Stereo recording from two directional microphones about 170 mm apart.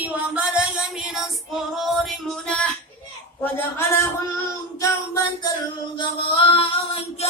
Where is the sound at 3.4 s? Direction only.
15° left (ahead or behind).